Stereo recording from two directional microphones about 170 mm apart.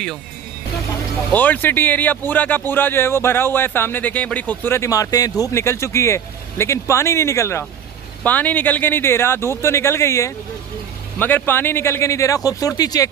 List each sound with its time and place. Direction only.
1.3 s speech: 10° left (ahead or behind)